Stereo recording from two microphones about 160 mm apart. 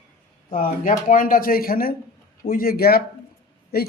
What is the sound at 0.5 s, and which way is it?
A man's voice, 55° left (ahead or behind).